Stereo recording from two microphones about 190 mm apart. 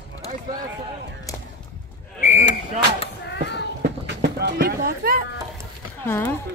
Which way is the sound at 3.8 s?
65° right (ahead or behind).